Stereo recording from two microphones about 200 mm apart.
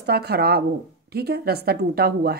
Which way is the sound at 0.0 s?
55° right (ahead or behind).